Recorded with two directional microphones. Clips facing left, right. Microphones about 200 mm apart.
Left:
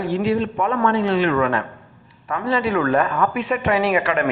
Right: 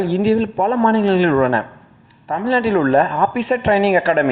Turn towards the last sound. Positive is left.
turn(degrees=-35)  # may be behind; listen again after turning